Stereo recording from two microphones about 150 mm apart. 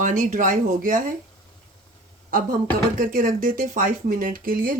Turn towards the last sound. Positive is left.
turn(degrees=-70)  # may be behind; listen again after turning